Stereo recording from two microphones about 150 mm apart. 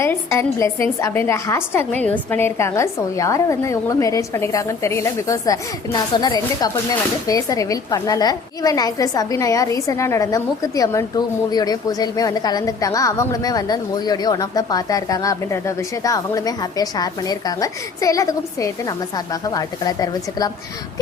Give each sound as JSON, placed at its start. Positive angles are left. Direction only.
{"t": 0.0, "sound": "a woman's voice", "side_deg": 20}